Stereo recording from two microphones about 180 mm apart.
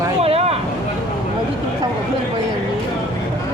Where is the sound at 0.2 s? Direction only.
35° right (ahead or behind).